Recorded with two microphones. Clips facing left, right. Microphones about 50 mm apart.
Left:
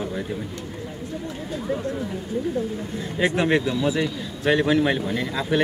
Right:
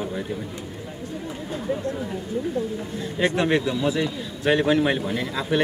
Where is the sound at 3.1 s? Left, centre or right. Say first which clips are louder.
Left 1 dB; centre.